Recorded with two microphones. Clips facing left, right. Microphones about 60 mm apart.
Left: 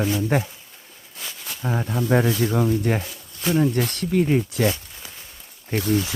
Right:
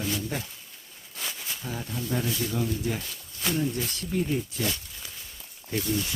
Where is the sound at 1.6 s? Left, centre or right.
Left.